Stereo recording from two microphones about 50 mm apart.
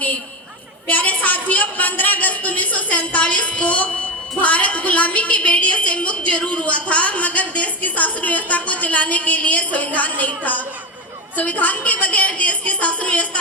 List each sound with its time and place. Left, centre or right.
0.9 s a woman's voice: left